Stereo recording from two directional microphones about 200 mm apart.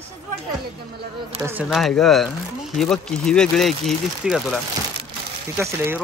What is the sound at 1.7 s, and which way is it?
Speech, centre (ahead or behind).